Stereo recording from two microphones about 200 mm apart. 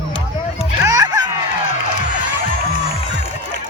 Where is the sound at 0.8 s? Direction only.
20° right (ahead or behind).